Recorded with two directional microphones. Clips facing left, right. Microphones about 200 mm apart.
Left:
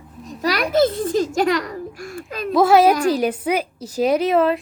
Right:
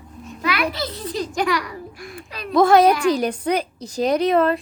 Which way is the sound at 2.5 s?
5° left (ahead or behind).